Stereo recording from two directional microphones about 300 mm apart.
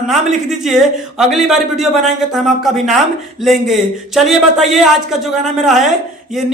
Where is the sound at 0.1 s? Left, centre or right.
Centre.